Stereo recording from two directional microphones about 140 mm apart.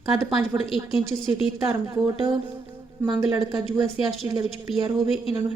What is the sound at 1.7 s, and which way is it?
A woman's voice, 35° right (ahead or behind).